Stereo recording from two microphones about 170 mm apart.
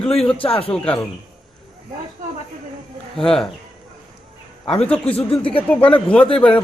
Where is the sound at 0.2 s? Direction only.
35° left (ahead or behind).